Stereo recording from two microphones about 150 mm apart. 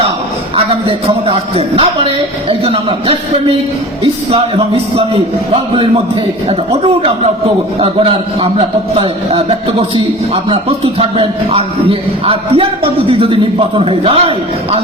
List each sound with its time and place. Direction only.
0.5 s a man's voice: 40° right (ahead or behind)